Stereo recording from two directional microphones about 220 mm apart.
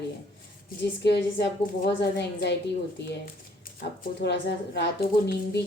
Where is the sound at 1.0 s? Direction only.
50° left (ahead or behind).